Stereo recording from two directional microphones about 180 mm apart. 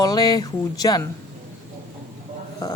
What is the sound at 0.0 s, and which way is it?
Speech, 20° left (ahead or behind).